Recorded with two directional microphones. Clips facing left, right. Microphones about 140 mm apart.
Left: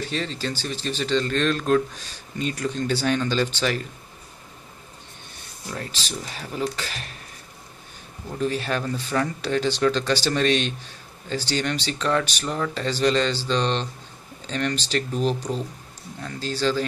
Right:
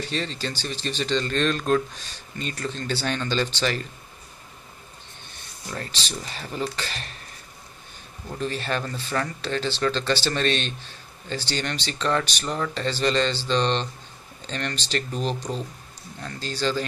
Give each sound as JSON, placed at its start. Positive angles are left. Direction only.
{"t": 0.0, "sound": "speech", "side_deg": 5}
{"t": 5.7, "sound": "speech", "side_deg": 5}
{"t": 8.3, "sound": "speech", "side_deg": 5}